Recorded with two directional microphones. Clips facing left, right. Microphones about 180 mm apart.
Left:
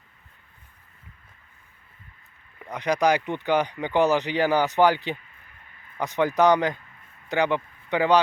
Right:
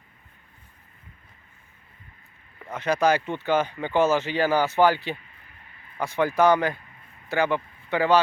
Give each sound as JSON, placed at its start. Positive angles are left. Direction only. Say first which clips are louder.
{"t": 2.6, "sound": "speech", "louder": "even", "side_deg": 15}